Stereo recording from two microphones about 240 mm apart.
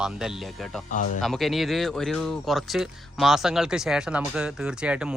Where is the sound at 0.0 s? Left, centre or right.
Centre.